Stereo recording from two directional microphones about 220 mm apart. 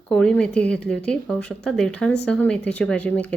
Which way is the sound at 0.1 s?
5° left (ahead or behind).